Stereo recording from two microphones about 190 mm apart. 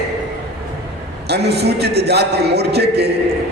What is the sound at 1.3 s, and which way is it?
A man's voice, 60° right (ahead or behind).